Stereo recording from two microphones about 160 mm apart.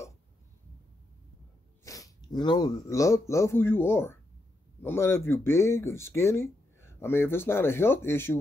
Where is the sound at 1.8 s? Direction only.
20° left (ahead or behind).